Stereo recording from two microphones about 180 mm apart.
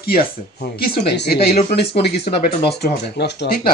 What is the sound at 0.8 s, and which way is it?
Speech, 65° left (ahead or behind).